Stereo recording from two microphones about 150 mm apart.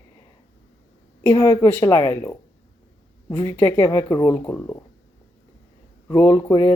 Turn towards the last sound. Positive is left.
turn(degrees=20)  # may be behind; listen again after turning